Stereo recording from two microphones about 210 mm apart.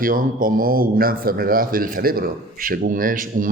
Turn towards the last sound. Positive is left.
turn(degrees=-40)  # may be behind; listen again after turning